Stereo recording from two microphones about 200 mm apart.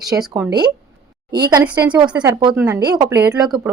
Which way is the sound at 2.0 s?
5° right (ahead or behind).